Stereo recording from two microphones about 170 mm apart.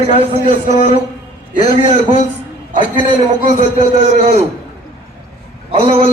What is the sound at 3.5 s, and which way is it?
Speech, 45° right (ahead or behind).